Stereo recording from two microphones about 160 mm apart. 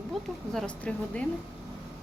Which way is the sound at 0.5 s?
5° left (ahead or behind).